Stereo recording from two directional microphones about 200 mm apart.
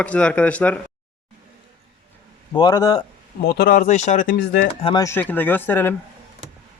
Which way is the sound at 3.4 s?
50° left (ahead or behind).